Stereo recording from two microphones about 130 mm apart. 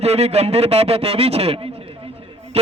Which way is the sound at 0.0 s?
55° right (ahead or behind).